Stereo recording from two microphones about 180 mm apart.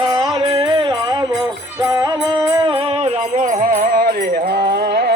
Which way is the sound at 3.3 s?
45° right (ahead or behind).